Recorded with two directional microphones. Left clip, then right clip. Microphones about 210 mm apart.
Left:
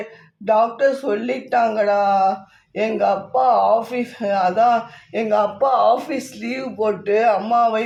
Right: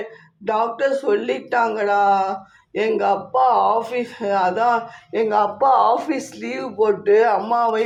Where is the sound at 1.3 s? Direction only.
15° right (ahead or behind).